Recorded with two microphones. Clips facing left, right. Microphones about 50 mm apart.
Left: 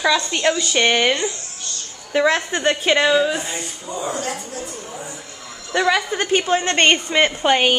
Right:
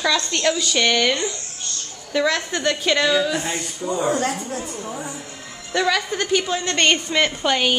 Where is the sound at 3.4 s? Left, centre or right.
Right.